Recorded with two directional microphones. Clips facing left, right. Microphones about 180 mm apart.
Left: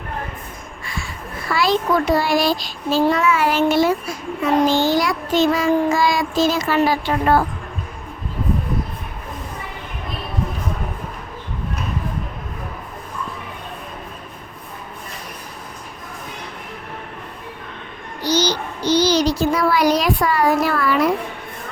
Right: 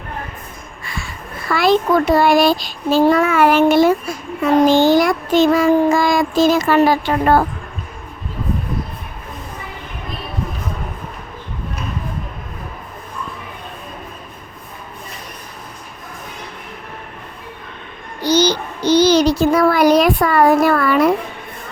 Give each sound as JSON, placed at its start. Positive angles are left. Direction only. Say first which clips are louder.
{"t": 1.5, "sound": "child singing", "louder": "right 4 dB", "side_deg": -55}
{"t": 18.2, "sound": "child singing", "louder": "right 4 dB", "side_deg": -55}